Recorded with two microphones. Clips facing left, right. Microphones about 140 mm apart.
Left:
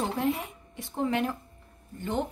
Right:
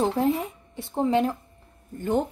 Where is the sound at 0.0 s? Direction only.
35° right (ahead or behind).